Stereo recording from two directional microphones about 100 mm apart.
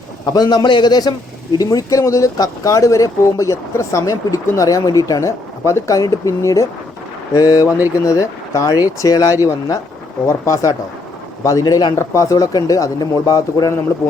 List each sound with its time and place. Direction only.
0.3 s a man's voice: 40° left (ahead or behind)
11.9 s speech: 30° left (ahead or behind)